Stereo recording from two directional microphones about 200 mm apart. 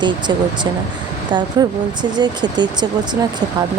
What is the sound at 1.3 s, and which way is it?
Speech, 20° right (ahead or behind).